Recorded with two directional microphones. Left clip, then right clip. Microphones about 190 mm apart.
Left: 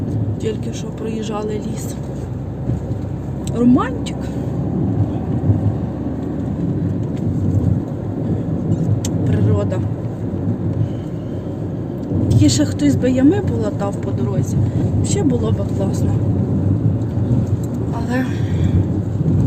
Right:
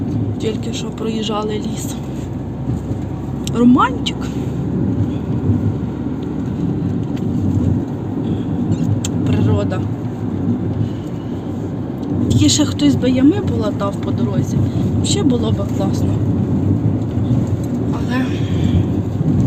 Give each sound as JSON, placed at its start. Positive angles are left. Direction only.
{"t": 1.0, "sound": "speech", "side_deg": 10}
{"t": 3.5, "sound": "speech", "side_deg": 0}
{"t": 9.2, "sound": "vehicle", "side_deg": 5}
{"t": 12.3, "sound": "a woman's voice", "side_deg": 0}
{"t": 12.8, "sound": "speech", "side_deg": 15}
{"t": 15.0, "sound": "speech", "side_deg": 0}